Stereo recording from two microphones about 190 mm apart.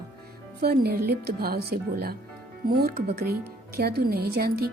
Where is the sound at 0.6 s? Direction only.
55° right (ahead or behind).